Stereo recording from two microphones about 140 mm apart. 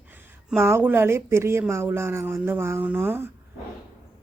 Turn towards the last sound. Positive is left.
turn(degrees=-15)  # may be behind; listen again after turning